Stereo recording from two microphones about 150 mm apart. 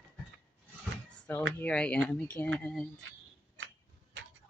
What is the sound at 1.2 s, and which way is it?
Speech, 10° left (ahead or behind).